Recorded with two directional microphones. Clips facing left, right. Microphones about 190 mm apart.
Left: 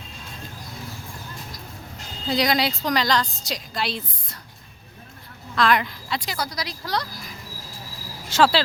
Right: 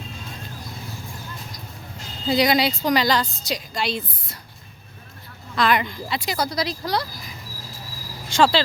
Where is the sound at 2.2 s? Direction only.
Centre (ahead or behind).